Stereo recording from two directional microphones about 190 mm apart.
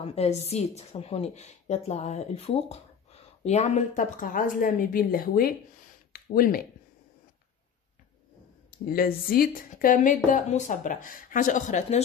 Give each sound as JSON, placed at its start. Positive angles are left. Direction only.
{"t": 0.0, "sound": "a woman's voice", "side_deg": 30}
{"t": 8.9, "sound": "speech", "side_deg": 50}